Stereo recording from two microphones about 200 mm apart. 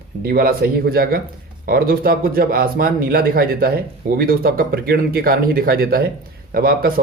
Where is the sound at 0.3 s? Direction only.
50° right (ahead or behind).